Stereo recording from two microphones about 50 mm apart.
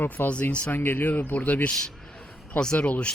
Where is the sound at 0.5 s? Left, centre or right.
Left.